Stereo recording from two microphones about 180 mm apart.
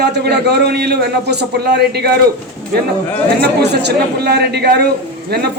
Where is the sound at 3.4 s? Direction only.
70° right (ahead or behind).